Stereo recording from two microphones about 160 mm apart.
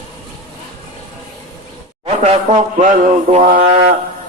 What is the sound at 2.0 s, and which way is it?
Mantra, 40° right (ahead or behind).